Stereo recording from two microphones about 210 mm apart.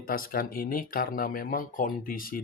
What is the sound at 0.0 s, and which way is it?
Speech, 45° left (ahead or behind).